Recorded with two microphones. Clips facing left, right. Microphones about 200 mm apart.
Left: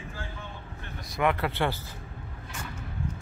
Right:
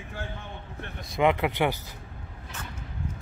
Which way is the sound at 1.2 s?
20° right (ahead or behind).